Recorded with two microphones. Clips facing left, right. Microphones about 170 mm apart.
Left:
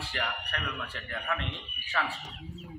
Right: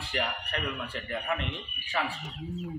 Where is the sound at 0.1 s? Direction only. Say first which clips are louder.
Right 5 dB; 20° right (ahead or behind).